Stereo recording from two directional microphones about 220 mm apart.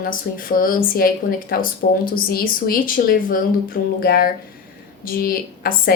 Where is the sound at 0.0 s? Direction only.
40° left (ahead or behind).